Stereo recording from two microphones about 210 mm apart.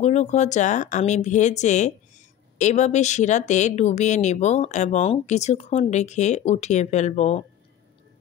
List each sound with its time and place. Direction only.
0.0 s speech: 30° left (ahead or behind)